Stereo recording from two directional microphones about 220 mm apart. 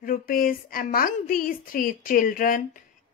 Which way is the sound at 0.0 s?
40° left (ahead or behind).